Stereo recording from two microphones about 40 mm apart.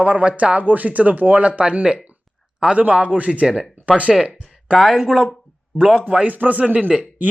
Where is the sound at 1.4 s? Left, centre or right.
Right.